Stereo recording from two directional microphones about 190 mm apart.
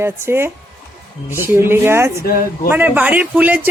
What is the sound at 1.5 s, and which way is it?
A man's voice, 10° right (ahead or behind).